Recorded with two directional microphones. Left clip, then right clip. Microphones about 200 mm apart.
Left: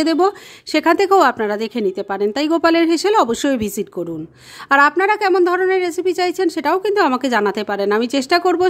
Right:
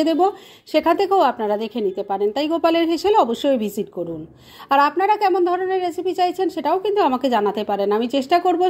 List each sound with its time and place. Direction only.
0.0 s a woman's voice: 25° left (ahead or behind)